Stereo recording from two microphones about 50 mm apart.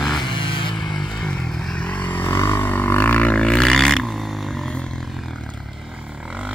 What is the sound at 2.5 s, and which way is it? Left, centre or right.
Music, left.